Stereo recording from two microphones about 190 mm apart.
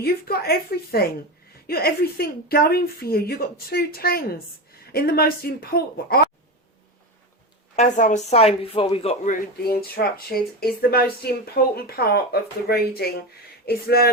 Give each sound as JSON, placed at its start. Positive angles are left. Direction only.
{"t": 0.0, "sound": "a woman's voice", "side_deg": 55}
{"t": 7.8, "sound": "speech", "side_deg": 40}